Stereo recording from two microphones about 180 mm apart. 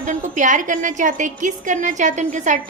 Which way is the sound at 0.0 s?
45° right (ahead or behind).